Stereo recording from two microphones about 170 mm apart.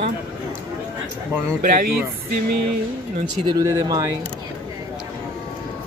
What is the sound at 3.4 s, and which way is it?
Speech, 20° right (ahead or behind).